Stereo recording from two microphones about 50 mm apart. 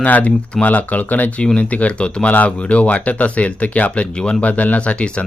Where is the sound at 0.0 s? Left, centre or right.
Left.